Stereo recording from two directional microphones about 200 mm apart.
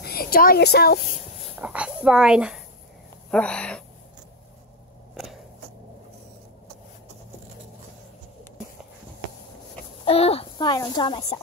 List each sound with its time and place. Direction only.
0.0 s speech: 50° left (ahead or behind)
1.6 s a child's voice: 5° right (ahead or behind)
5.1 s a sound: centre (ahead or behind)
10.0 s a woman's voice: 30° left (ahead or behind)